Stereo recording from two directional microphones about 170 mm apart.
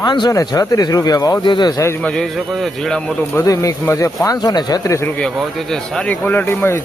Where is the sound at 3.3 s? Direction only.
20° left (ahead or behind).